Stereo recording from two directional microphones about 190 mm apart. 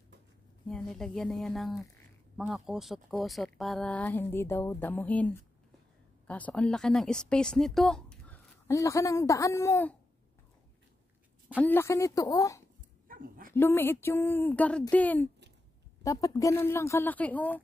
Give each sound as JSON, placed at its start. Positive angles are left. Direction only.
{"t": 0.7, "sound": "speech", "side_deg": 5}
{"t": 8.6, "sound": "speech", "side_deg": 15}
{"t": 11.4, "sound": "speech", "side_deg": 10}
{"t": 13.1, "sound": "dog", "side_deg": -50}
{"t": 13.6, "sound": "speech", "side_deg": 10}